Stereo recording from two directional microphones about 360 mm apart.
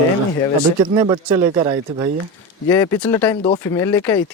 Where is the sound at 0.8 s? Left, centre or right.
Centre.